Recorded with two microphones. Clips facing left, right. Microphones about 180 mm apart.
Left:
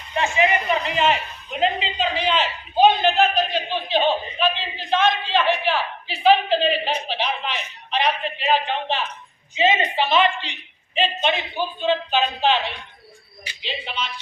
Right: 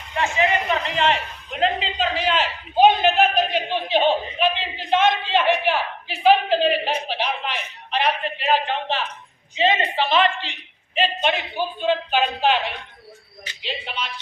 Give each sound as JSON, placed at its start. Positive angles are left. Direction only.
{"t": 0.1, "sound": "a sound", "side_deg": 20}
{"t": 0.9, "sound": "a man's voice", "side_deg": 5}
{"t": 13.6, "sound": "a man's voice", "side_deg": -5}